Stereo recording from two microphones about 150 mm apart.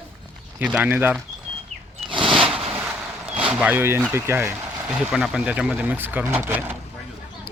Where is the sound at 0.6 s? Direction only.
10° right (ahead or behind).